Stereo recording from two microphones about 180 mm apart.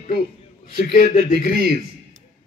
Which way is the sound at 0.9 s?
45° left (ahead or behind).